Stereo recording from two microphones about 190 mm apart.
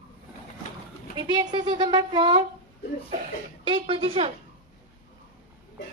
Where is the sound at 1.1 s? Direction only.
20° right (ahead or behind).